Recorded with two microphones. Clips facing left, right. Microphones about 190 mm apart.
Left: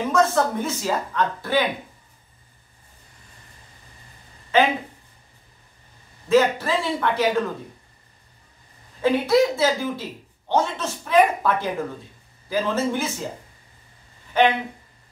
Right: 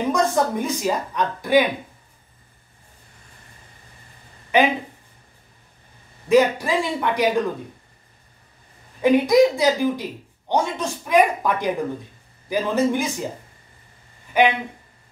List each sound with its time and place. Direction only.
0.0 s a woman's voice: 15° right (ahead or behind)
4.5 s a woman's voice: 15° right (ahead or behind)
6.2 s a woman's voice: 15° right (ahead or behind)
9.0 s a woman's voice: 15° right (ahead or behind)
14.3 s a woman's voice: 10° right (ahead or behind)